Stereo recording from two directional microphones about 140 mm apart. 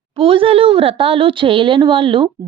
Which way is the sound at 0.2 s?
40° right (ahead or behind).